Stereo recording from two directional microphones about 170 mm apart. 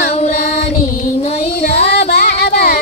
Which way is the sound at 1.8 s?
75° left (ahead or behind).